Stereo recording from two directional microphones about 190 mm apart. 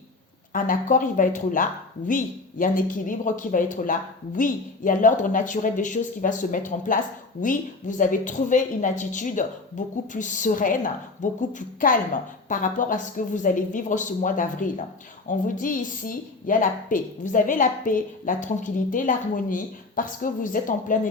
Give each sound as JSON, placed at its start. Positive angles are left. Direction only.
{"t": 0.5, "sound": "a woman's voice", "side_deg": 45}